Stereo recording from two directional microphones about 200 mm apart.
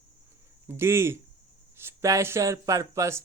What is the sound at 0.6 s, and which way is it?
Speech, 10° right (ahead or behind).